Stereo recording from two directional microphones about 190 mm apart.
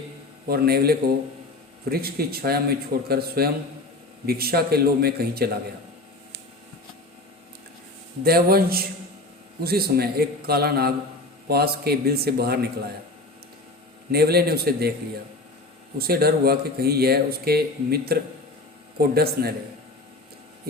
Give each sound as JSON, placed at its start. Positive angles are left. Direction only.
{"t": 0.4, "sound": "a man's voice", "side_deg": -55}
{"t": 8.2, "sound": "a man's voice", "side_deg": -50}
{"t": 14.1, "sound": "speech", "side_deg": -55}
{"t": 16.0, "sound": "speech", "side_deg": -55}